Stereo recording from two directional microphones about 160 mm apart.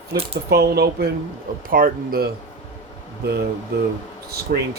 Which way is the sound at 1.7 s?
60° right (ahead or behind).